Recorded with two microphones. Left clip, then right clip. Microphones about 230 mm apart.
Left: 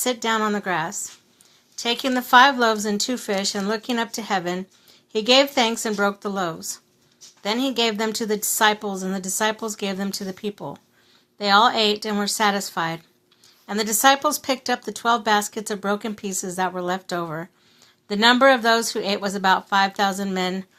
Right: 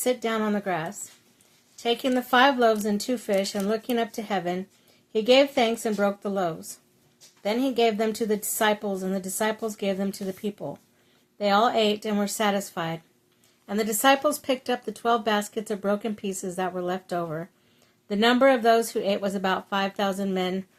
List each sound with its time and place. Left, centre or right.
0.0 s speech: centre